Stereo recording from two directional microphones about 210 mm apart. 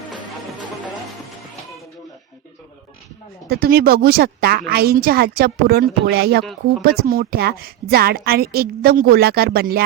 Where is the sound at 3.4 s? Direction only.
45° right (ahead or behind).